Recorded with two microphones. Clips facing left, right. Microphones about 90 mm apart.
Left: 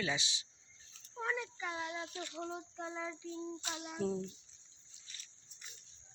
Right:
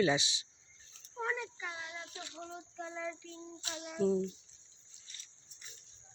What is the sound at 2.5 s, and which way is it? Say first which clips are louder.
Female singing: left 2 dB; 20° left (ahead or behind).